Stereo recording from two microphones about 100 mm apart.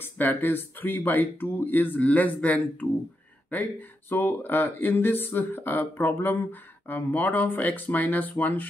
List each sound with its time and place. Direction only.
0.0 s speech: 20° left (ahead or behind)